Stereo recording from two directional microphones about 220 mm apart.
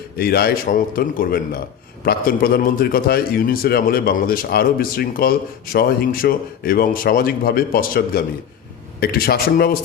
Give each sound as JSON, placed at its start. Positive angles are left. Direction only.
{"t": 0.2, "sound": "a man's voice", "side_deg": 45}